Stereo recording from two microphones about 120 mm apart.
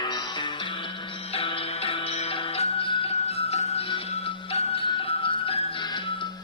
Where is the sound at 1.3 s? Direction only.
50° left (ahead or behind).